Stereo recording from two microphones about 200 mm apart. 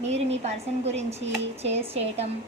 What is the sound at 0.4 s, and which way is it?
A woman's voice, 30° right (ahead or behind).